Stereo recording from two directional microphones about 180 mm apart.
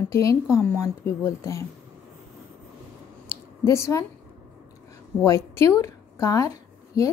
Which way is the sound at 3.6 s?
15° left (ahead or behind).